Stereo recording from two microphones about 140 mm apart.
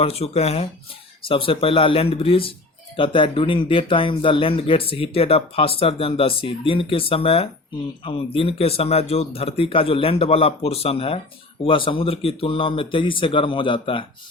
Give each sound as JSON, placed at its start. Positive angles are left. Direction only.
{"t": 0.0, "sound": "a man's voice", "side_deg": 45}